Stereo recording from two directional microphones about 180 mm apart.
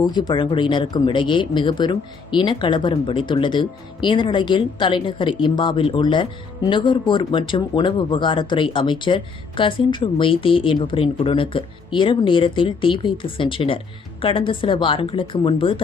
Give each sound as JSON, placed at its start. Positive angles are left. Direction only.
{"t": 0.0, "sound": "speech", "side_deg": 25}